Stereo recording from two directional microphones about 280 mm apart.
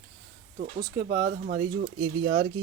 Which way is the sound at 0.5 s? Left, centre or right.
Right.